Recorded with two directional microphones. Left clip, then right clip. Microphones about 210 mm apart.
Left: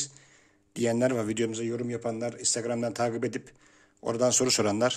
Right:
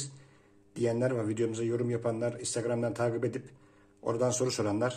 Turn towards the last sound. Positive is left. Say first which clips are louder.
# left 5 dB
turn(degrees=40)  # may be behind; listen again after turning